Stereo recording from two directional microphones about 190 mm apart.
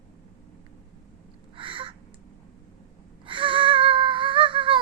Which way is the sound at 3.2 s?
25° right (ahead or behind).